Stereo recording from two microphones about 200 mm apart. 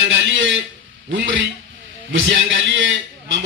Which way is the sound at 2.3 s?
70° right (ahead or behind).